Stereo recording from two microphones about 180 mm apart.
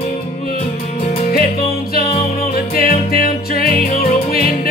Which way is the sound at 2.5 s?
55° left (ahead or behind).